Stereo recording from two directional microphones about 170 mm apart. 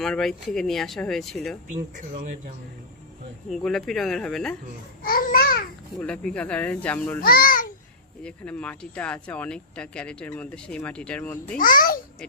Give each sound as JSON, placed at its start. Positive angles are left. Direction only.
{"t": 0.0, "sound": "speech", "side_deg": 5}
{"t": 3.5, "sound": "speech", "side_deg": 0}
{"t": 5.0, "sound": "babbling", "side_deg": 55}
{"t": 6.0, "sound": "speech", "side_deg": 5}
{"t": 7.2, "sound": "a child's voice", "side_deg": 60}
{"t": 8.2, "sound": "speech", "side_deg": 5}
{"t": 11.5, "sound": "a child's voice", "side_deg": 55}